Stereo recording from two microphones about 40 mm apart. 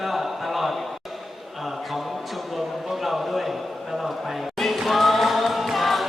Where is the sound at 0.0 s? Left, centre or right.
Centre.